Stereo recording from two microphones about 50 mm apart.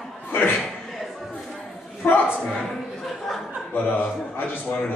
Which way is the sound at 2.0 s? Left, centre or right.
Left.